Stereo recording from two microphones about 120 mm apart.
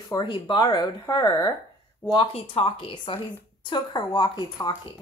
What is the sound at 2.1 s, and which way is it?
Speech, 45° left (ahead or behind).